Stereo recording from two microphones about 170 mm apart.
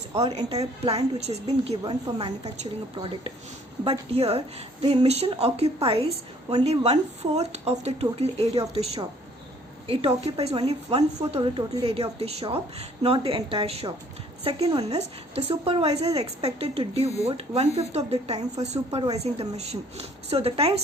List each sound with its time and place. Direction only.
0.2 s a woman's voice: 30° right (ahead or behind)
1.6 s a woman's voice: 25° right (ahead or behind)